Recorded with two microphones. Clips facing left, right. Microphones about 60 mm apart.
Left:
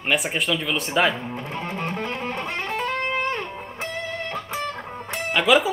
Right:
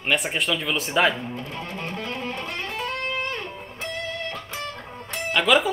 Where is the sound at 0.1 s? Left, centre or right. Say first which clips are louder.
Left 1 dB; centre.